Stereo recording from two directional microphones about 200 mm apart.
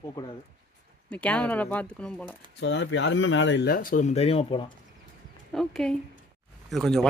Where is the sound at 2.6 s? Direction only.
65° left (ahead or behind); by 4.7 s 25° left (ahead or behind).